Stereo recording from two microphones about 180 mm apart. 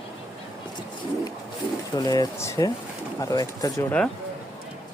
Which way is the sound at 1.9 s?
20° left (ahead or behind).